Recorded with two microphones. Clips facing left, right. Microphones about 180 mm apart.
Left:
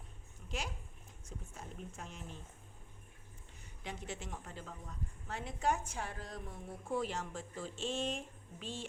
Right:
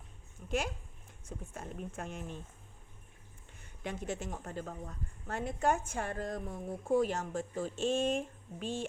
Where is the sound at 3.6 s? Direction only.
50° right (ahead or behind).